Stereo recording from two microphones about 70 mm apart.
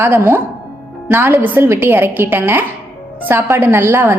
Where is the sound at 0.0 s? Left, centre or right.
Right.